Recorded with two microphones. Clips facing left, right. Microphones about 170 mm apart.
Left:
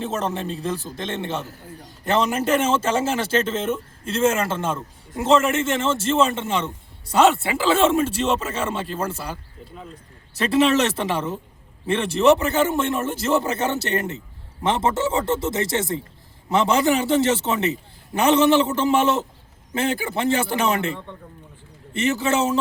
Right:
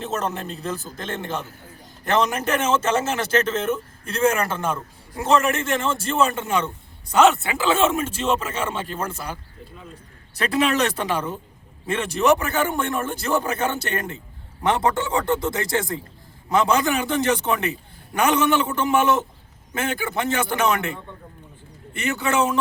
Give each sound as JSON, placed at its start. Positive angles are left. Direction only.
{"t": 0.0, "sound": "a man's voice", "side_deg": 30}
{"t": 10.3, "sound": "a man's voice", "side_deg": 25}
{"t": 21.9, "sound": "a man's voice", "side_deg": 25}